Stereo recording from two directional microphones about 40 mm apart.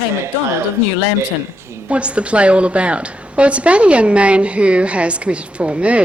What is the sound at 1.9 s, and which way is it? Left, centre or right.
Speech, right.